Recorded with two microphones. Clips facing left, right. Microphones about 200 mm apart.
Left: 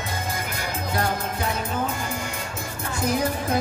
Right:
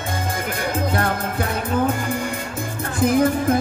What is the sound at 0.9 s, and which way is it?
Music, 55° right (ahead or behind).